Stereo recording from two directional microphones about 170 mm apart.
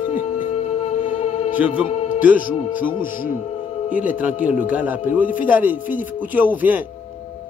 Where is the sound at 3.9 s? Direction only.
10° right (ahead or behind).